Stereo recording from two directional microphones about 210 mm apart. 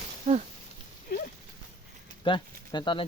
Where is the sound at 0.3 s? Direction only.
30° right (ahead or behind).